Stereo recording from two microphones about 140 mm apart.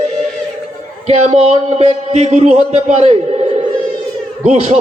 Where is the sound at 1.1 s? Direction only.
50° right (ahead or behind).